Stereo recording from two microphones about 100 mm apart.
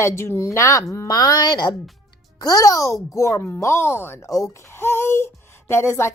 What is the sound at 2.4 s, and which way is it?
A woman's voice, 35° left (ahead or behind).